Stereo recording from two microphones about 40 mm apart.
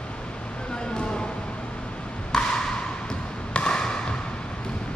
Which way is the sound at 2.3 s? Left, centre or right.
Centre.